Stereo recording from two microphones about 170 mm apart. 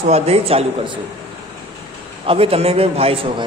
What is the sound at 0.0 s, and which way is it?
Speech, 40° right (ahead or behind).